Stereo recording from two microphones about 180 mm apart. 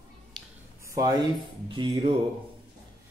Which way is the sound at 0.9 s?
20° right (ahead or behind).